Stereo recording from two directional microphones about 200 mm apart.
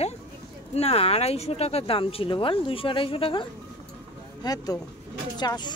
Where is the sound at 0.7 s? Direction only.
30° left (ahead or behind).